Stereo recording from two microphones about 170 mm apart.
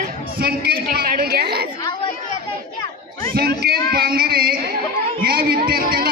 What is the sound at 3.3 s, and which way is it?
Speech, 65° right (ahead or behind).